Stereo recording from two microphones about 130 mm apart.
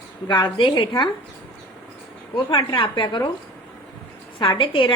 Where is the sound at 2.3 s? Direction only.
35° left (ahead or behind).